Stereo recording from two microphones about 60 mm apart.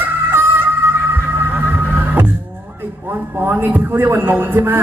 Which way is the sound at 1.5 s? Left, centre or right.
Right.